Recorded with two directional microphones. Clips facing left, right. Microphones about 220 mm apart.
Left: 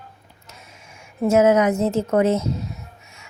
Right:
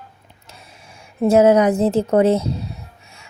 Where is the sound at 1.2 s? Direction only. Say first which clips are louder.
Right 3 dB; 35° right (ahead or behind).